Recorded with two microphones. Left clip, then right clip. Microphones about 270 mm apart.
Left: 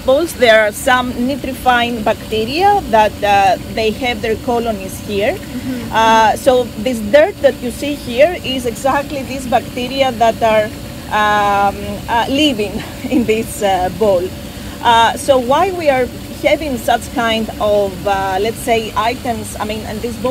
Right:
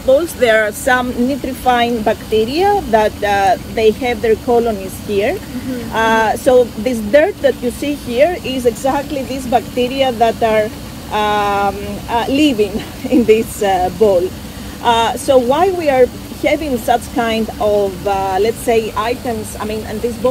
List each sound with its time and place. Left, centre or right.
0.1 s speech: left
10.0 s speech: left